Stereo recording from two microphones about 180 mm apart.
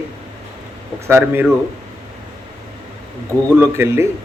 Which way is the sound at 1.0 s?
15° right (ahead or behind).